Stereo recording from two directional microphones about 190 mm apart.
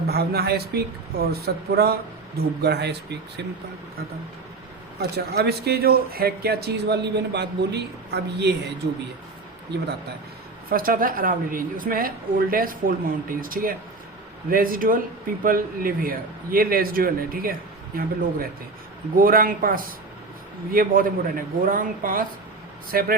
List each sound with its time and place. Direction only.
0.1 s speech: 55° right (ahead or behind)
4.9 s speech: 55° right (ahead or behind)
9.7 s speech: 60° right (ahead or behind)
10.7 s a woman's voice: 50° right (ahead or behind)